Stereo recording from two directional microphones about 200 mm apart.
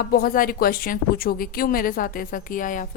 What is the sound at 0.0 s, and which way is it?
A woman's voice, 50° left (ahead or behind).